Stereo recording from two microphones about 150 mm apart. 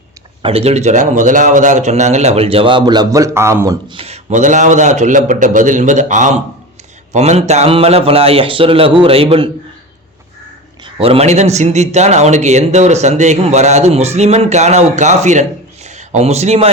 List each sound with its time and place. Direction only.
0.4 s speech: 45° right (ahead or behind); by 3.9 s 20° right (ahead or behind)
3.9 s a man's voice: 45° right (ahead or behind)
10.8 s speech: 40° right (ahead or behind)